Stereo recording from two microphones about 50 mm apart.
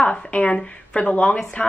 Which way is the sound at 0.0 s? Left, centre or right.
Left.